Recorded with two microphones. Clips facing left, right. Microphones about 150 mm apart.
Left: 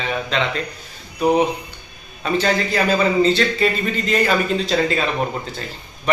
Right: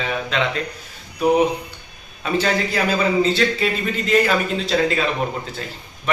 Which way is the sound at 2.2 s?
5° right (ahead or behind).